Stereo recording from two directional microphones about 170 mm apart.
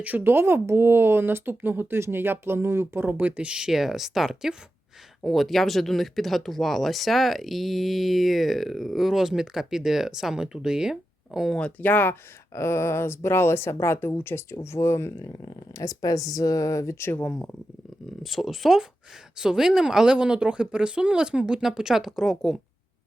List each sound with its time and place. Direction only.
0.0 s speech: 10° right (ahead or behind)